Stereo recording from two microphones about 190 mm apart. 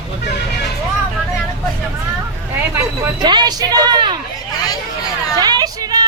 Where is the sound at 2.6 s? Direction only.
15° right (ahead or behind).